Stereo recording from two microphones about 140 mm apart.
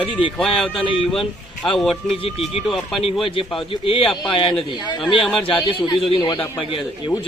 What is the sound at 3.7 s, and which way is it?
A man's voice, 40° left (ahead or behind).